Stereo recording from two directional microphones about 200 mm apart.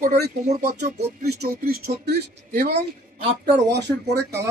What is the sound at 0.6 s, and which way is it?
Speech, 35° right (ahead or behind).